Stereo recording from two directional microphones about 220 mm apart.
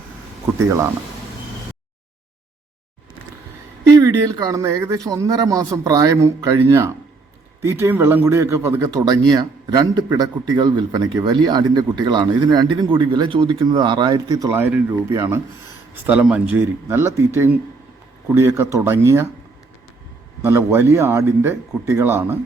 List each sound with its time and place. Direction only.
3.8 s speech: 15° right (ahead or behind)
20.4 s speech: 10° right (ahead or behind)